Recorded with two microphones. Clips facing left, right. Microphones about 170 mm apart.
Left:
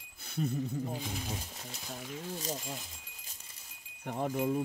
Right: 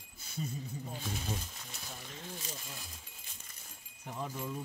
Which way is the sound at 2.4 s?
40° left (ahead or behind).